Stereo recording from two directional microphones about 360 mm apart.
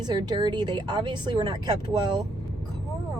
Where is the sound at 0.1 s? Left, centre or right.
Centre.